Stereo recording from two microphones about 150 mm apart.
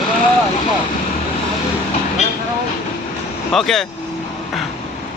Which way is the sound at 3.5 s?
Centre (ahead or behind).